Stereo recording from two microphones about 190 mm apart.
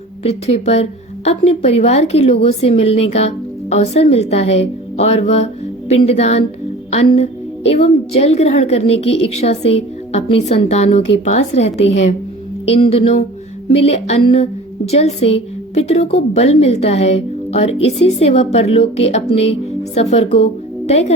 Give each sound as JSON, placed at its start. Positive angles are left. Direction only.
{"t": 0.3, "sound": "a woman's voice", "side_deg": 35}